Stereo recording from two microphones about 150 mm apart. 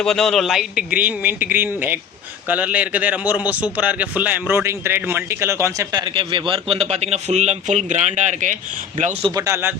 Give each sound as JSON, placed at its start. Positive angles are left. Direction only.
{"t": 0.0, "sound": "a man's voice", "side_deg": 5}
{"t": 9.3, "sound": "speech", "side_deg": -20}